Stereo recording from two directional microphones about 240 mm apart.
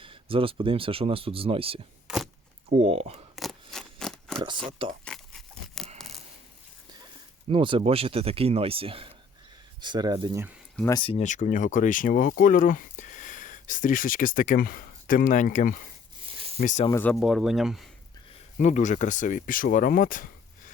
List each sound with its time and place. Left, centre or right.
0.0 s speech: right
2.0 s a sound: centre
2.7 s speech: right
3.3 s scissors: centre
5.0 s a sound: centre
7.5 s speech: centre
10.8 s speech: centre; by 16.9 s left
16.9 s speech: centre
18.6 s speech: left